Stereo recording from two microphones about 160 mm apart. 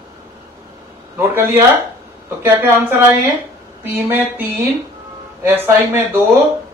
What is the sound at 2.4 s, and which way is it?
A man's voice, 15° right (ahead or behind).